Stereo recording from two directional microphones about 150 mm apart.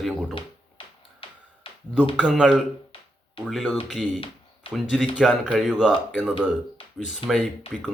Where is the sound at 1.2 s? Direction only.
35° left (ahead or behind).